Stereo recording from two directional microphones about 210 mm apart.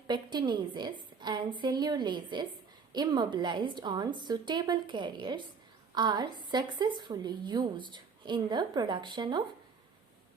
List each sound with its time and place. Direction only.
0.1 s a woman's voice: 20° right (ahead or behind)